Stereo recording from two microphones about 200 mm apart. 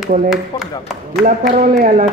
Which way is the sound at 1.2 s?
40° right (ahead or behind).